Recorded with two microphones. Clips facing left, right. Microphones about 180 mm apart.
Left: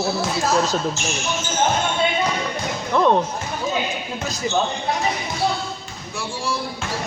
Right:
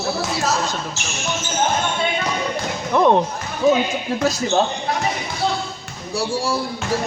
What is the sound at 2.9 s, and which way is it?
Speech, 15° right (ahead or behind).